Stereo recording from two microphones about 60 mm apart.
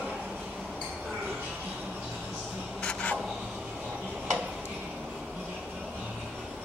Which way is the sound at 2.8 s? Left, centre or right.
Centre.